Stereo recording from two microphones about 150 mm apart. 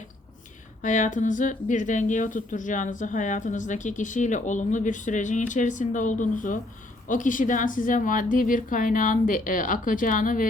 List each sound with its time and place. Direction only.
0.8 s speech: 60° left (ahead or behind)